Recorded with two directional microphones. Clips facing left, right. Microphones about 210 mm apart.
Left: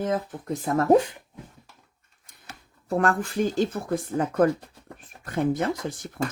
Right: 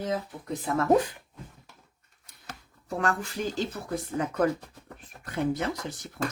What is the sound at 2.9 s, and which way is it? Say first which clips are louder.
Speech: left 6 dB; 55° left (ahead or behind).